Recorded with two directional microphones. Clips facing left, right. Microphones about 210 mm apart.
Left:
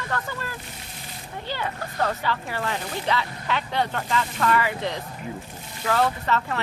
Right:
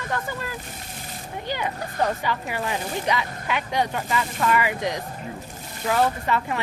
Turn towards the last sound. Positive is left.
turn(degrees=-10)  # may be behind; listen again after turning